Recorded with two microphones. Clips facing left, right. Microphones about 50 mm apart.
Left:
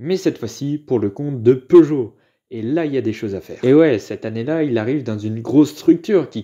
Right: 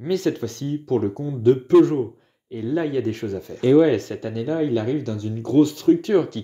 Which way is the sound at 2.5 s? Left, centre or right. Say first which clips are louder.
Left 4 dB; left.